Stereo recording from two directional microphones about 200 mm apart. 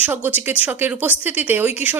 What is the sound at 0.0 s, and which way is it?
Speech, 10° right (ahead or behind).